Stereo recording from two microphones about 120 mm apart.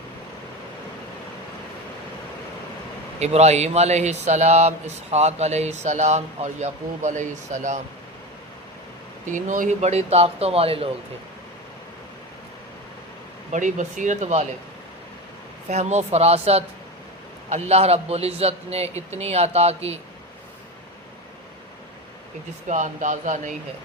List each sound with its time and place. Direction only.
3.2 s speech: 65° right (ahead or behind); by 7.8 s 90° right
9.3 s a man's voice: 85° right; by 10.8 s 55° right (ahead or behind)
13.5 s speech: 90° right; by 14.4 s 70° right (ahead or behind)
15.7 s a man's voice: 70° right (ahead or behind)
22.7 s speech: 90° right